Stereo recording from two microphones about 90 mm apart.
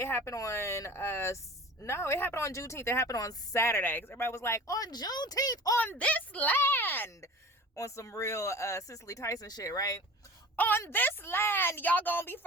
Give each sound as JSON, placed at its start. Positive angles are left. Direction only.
{"t": 0.0, "sound": "speech", "side_deg": 30}
{"t": 5.7, "sound": "a woman's voice", "side_deg": 25}
{"t": 10.6, "sound": "a woman's voice", "side_deg": 25}